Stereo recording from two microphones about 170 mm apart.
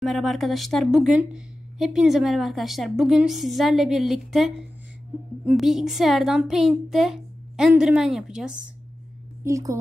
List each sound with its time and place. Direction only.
0.0 s speech: centre (ahead or behind)
9.4 s a woman's voice: 20° right (ahead or behind)